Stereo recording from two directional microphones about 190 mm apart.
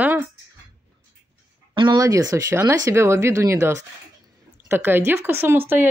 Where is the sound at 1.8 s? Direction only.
20° right (ahead or behind).